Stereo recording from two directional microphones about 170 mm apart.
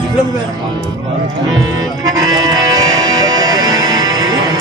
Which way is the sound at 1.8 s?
20° right (ahead or behind).